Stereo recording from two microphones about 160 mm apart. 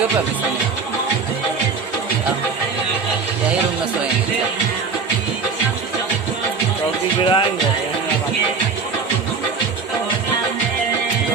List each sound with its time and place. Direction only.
7.2 s speech: 30° left (ahead or behind)